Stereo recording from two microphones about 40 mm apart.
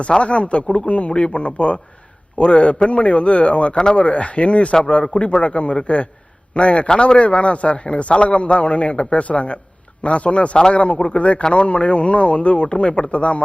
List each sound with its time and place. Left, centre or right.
0.0 s a man's voice: left